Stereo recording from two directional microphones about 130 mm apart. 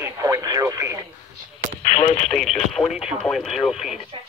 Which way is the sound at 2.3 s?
Centre (ahead or behind).